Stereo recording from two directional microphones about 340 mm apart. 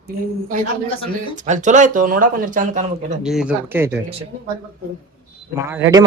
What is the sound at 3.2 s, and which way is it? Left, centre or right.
Speech, centre.